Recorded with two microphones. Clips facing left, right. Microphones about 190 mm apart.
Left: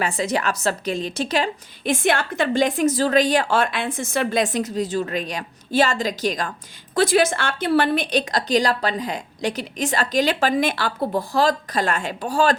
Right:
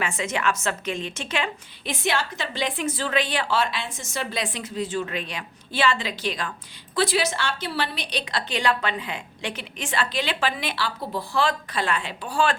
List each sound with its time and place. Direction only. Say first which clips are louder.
0.0 s a woman's voice: left 3 dB; 35° left (ahead or behind)